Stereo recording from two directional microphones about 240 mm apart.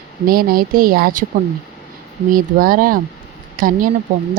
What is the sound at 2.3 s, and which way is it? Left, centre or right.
Speech, right.